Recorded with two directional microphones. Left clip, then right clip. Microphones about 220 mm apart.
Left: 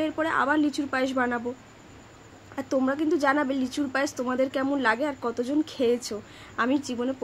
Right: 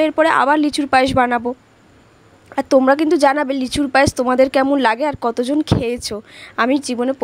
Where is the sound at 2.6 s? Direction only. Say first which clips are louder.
Right 13 dB; 40° right (ahead or behind).